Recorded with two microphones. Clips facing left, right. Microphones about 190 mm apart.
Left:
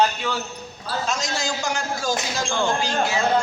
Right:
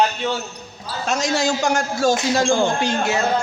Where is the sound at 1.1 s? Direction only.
65° right (ahead or behind).